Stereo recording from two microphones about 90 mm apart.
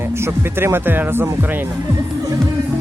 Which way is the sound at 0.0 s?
30° right (ahead or behind).